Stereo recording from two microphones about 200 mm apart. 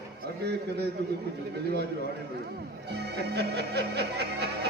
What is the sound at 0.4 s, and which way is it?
Speech, 55° right (ahead or behind).